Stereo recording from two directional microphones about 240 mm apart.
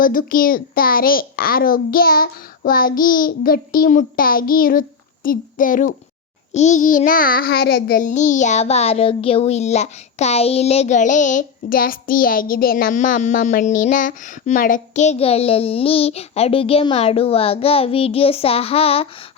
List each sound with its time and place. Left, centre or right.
0.0 s a child's voice: left
6.5 s child singing: left